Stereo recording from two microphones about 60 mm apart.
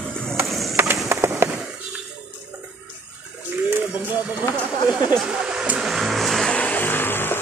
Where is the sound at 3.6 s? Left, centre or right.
Right; by 5.7 s centre.